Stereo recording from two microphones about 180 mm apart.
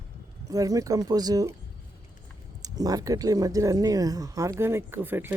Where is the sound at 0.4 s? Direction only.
20° right (ahead or behind).